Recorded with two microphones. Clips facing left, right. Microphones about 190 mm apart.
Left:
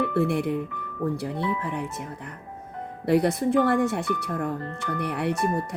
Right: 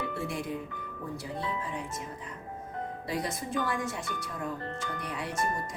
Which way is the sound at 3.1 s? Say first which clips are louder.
Left 14 dB; 65° left (ahead or behind).